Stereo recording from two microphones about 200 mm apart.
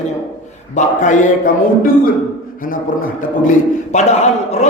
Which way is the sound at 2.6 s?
45° left (ahead or behind).